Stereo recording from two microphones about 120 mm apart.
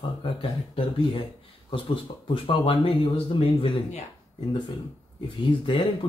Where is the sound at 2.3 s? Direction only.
50° left (ahead or behind).